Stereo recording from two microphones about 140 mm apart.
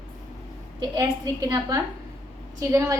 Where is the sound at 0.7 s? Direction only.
30° right (ahead or behind).